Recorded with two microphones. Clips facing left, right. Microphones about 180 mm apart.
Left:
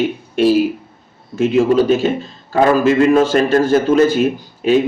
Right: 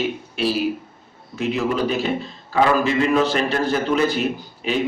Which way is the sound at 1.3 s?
45° left (ahead or behind).